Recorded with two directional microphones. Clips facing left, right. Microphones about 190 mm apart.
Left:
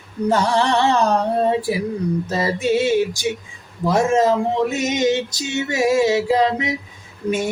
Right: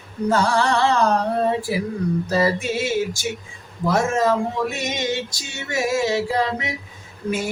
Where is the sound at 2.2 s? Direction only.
25° left (ahead or behind).